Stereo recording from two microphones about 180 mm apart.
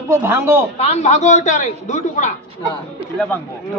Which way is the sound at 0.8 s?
35° left (ahead or behind).